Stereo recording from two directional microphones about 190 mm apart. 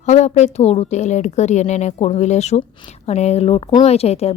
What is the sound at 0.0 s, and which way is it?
Speech, 35° left (ahead or behind).